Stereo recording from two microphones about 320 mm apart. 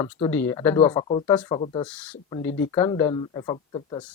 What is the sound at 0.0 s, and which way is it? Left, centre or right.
Speech, centre.